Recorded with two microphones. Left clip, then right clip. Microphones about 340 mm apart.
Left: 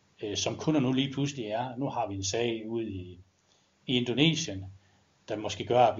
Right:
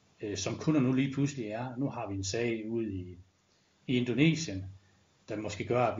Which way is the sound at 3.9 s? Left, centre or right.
Left.